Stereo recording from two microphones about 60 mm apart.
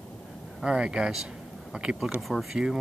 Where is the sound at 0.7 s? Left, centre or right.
Centre.